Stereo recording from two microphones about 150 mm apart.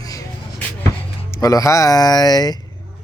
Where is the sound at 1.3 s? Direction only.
25° left (ahead or behind).